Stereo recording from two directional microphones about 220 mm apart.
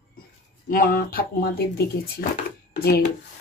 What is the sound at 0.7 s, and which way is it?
Speech, 40° left (ahead or behind).